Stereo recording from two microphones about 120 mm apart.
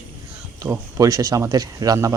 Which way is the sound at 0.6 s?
30° right (ahead or behind).